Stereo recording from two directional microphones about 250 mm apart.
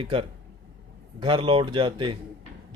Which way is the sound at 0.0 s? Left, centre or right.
Right.